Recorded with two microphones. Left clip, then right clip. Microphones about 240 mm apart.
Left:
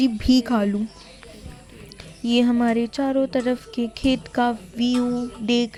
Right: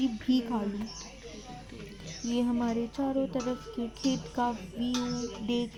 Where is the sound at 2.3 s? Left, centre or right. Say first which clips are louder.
Left 11 dB; left.